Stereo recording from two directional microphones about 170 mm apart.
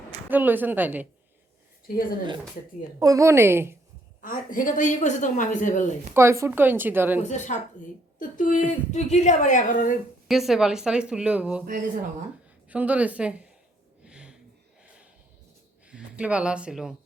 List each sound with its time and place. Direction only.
0.3 s a woman's voice: 10° right (ahead or behind)
3.0 s a woman's voice: 20° right (ahead or behind)
4.2 s a woman's voice: 50° left (ahead or behind)
6.1 s a woman's voice: 15° right (ahead or behind)
7.2 s a woman's voice: 45° left (ahead or behind)
10.2 s a woman's voice: centre (ahead or behind)
12.6 s a woman's voice: 10° right (ahead or behind)
14.0 s a sound: 5° right (ahead or behind)
15.9 s speech: 5° right (ahead or behind)